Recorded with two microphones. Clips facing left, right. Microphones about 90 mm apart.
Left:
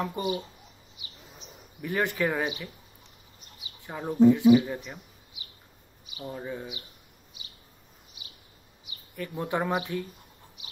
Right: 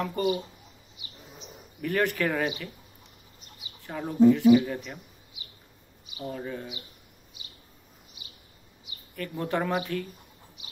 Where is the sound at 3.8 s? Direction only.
15° left (ahead or behind).